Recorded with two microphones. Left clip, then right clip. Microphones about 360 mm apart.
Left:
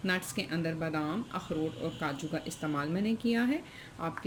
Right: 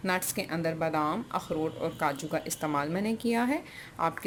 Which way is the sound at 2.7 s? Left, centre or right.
Centre.